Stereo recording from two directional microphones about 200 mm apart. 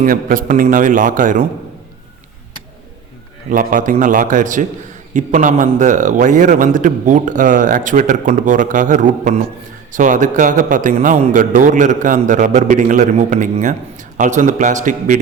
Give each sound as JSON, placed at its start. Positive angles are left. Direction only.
{"t": 0.0, "sound": "a man's voice", "side_deg": -45}
{"t": 3.5, "sound": "a man's voice", "side_deg": -45}